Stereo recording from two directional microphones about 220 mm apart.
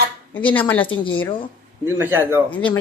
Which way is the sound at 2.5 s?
20° left (ahead or behind).